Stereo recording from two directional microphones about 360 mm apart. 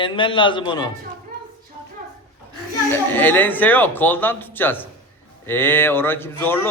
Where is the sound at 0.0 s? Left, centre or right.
Centre.